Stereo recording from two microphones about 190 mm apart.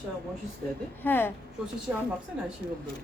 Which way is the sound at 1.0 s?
10° left (ahead or behind).